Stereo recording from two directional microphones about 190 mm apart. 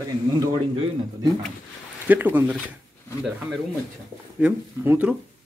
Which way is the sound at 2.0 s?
10° right (ahead or behind).